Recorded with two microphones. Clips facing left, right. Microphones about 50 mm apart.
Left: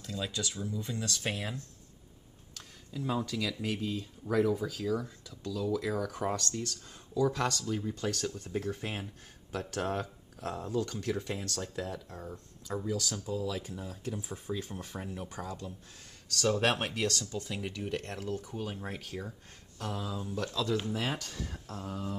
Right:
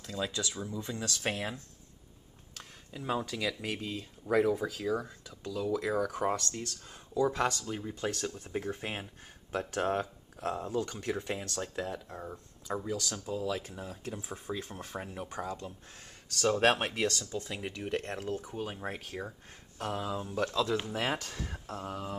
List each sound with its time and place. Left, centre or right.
0.0 s speech: right
2.5 s speech: right
16.3 s speech: centre; by 20.5 s right
20.5 s speech: centre
20.9 s speech: right